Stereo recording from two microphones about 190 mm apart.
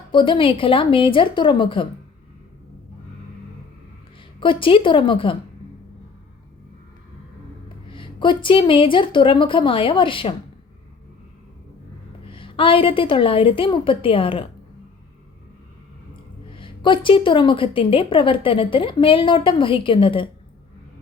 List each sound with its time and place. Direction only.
0.1 s a woman's voice: 25° left (ahead or behind)
4.4 s a woman's voice: 25° left (ahead or behind)
7.9 s a woman's voice: 25° left (ahead or behind)
12.2 s a woman's voice: 25° left (ahead or behind)
16.5 s a woman's voice: 25° left (ahead or behind)